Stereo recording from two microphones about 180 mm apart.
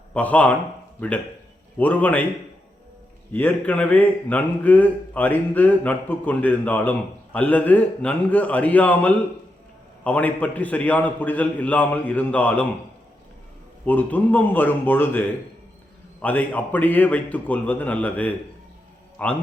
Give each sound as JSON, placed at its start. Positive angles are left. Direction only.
{"t": 0.1, "sound": "a man's voice", "side_deg": 10}
{"t": 1.8, "sound": "a man's voice", "side_deg": 10}
{"t": 3.3, "sound": "a man's voice", "side_deg": 10}
{"t": 13.8, "sound": "a man's voice", "side_deg": 10}
{"t": 16.2, "sound": "a man's voice", "side_deg": 10}